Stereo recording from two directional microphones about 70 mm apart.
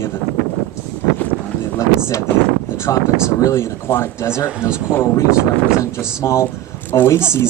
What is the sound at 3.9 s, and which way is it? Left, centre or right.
Speech, left.